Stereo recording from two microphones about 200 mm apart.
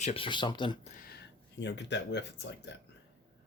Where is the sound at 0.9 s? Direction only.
45° left (ahead or behind).